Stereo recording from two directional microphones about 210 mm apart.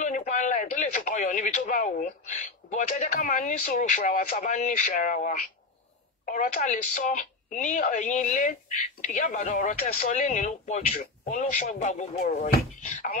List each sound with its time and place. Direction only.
0.0 s speech: 35° left (ahead or behind)